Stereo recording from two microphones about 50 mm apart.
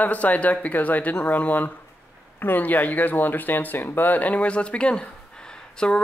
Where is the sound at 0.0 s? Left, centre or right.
Left.